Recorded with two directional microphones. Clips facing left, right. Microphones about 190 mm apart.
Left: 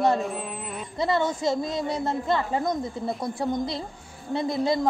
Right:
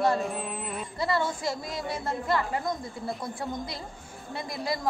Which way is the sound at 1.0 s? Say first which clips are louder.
Left 4 dB; 20° left (ahead or behind).